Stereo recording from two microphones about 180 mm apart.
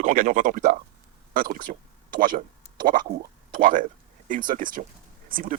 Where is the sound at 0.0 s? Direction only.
45° right (ahead or behind).